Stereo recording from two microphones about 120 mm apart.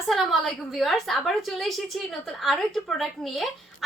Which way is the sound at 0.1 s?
Centre (ahead or behind).